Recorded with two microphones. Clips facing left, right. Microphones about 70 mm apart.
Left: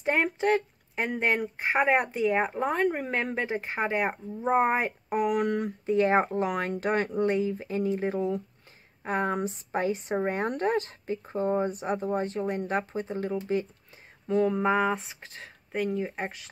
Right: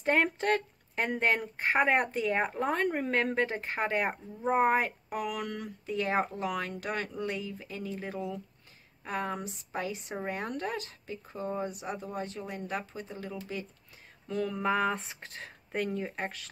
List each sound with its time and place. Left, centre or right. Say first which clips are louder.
0.0 s speech: left 2 dB; centre
4.8 s speech: left 7 dB; left
14.2 s a sound: left 7 dB; left
15.0 s speech: even; centre
16.2 s speech: left 2 dB; centre